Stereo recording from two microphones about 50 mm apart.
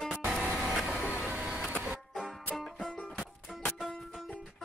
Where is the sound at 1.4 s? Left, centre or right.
Centre.